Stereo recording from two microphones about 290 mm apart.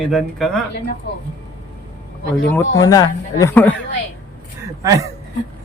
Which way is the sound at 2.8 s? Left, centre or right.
Centre.